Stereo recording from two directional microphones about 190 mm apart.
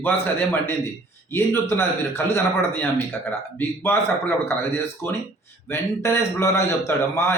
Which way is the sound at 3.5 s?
10° left (ahead or behind).